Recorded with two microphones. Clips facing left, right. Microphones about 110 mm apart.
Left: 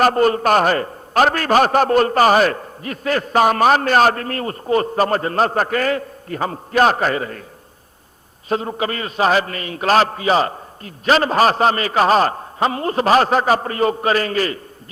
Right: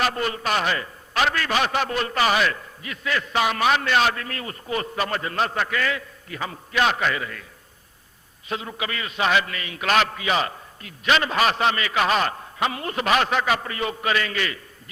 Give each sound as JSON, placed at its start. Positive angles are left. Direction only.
{"t": 0.0, "sound": "a man's voice", "side_deg": 45}
{"t": 8.4, "sound": "a man's voice", "side_deg": 40}